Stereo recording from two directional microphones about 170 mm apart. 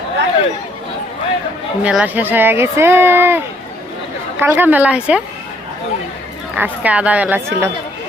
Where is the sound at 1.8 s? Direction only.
5° right (ahead or behind).